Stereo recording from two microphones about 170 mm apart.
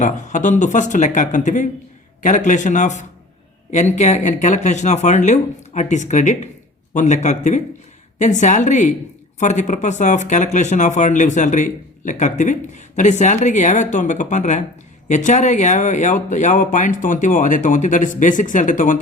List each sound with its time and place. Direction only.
0.0 s speech: 45° left (ahead or behind)